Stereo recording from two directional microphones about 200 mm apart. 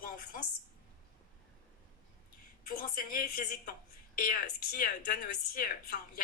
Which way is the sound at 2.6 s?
45° left (ahead or behind).